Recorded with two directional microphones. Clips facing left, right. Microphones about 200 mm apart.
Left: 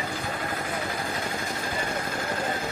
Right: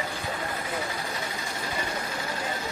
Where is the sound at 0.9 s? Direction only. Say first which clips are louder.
Left 3 dB; 55° left (ahead or behind).